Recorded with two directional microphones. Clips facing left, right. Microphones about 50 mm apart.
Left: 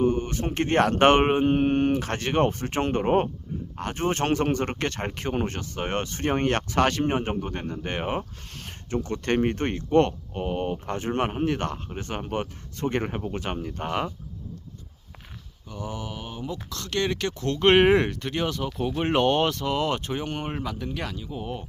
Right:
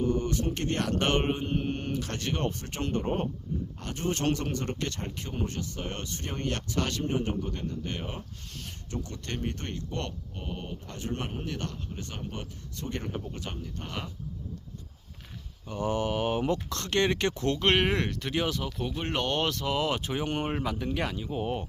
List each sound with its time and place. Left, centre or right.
0.0 s speech: left
15.7 s speech: right
16.6 s speech: right
17.7 s speech: centre
18.9 s speech: centre
19.4 s speech: centre